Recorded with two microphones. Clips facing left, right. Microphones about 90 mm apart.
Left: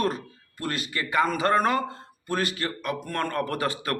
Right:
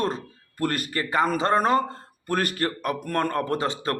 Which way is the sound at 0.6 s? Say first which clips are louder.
Right 4 dB; 50° right (ahead or behind).